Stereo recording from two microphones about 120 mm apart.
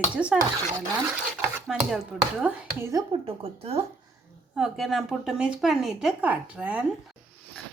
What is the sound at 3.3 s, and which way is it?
Speech, 55° right (ahead or behind).